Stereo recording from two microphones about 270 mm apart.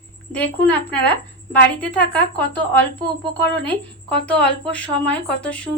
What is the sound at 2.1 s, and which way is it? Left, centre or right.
Speech, centre.